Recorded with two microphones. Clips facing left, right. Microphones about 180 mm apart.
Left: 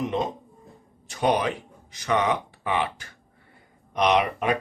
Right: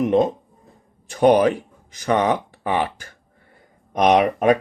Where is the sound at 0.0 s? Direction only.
55° right (ahead or behind).